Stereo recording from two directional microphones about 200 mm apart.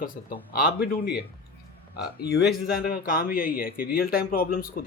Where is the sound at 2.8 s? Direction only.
45° left (ahead or behind).